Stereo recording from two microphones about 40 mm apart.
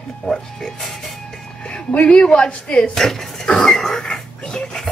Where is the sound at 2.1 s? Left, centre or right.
Left.